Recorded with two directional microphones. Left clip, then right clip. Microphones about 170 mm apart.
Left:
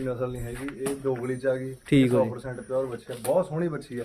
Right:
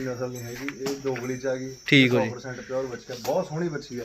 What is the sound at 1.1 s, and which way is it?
Speech, 20° left (ahead or behind).